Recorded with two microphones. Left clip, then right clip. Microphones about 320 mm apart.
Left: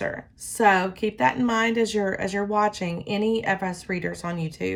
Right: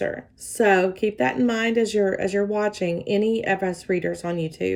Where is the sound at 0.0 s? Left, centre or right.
Centre.